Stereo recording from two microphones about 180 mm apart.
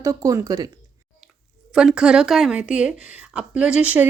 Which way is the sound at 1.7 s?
5° right (ahead or behind).